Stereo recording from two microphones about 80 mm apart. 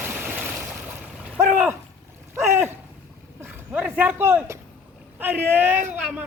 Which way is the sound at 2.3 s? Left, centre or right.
Right.